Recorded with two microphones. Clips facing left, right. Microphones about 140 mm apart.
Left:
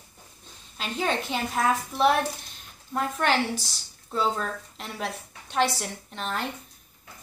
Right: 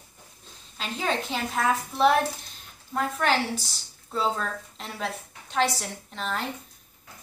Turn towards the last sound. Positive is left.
turn(degrees=0)  # may be behind; listen again after turning